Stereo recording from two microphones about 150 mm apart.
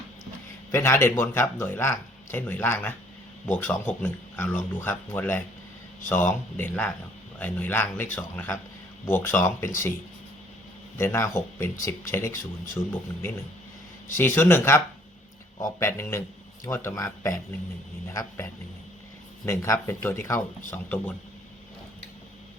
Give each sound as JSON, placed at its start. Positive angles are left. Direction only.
{"t": 0.7, "sound": "speech", "side_deg": 15}
{"t": 10.9, "sound": "speech", "side_deg": 15}
{"t": 14.2, "sound": "speech", "side_deg": 15}
{"t": 19.5, "sound": "speech", "side_deg": 15}